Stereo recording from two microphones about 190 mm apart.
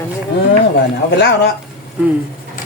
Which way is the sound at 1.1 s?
65° left (ahead or behind).